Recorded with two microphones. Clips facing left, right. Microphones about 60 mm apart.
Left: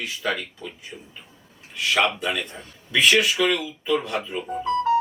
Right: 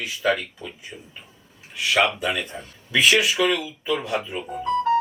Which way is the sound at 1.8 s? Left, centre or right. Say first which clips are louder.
Right 1 dB; centre.